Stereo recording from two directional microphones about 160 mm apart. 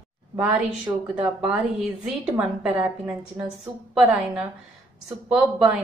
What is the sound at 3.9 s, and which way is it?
Speech, 5° right (ahead or behind).